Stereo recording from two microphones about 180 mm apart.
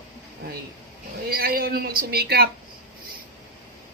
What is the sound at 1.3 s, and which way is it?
A man's voice, 55° right (ahead or behind).